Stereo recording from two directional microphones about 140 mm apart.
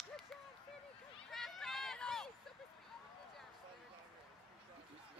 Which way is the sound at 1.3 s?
Centre (ahead or behind).